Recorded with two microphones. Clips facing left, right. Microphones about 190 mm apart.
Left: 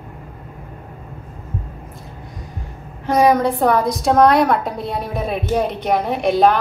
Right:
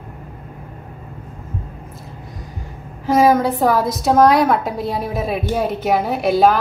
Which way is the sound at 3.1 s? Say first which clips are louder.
Right 1 dB; centre (ahead or behind).